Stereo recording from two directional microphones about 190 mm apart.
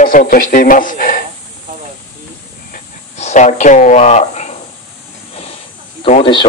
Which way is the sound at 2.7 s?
40° left (ahead or behind).